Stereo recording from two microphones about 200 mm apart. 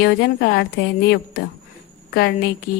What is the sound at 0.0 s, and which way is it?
A woman's voice, 55° left (ahead or behind).